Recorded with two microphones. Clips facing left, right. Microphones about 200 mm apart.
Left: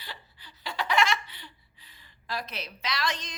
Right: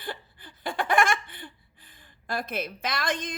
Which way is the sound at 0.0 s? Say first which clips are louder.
Right 9 dB; 50° right (ahead or behind).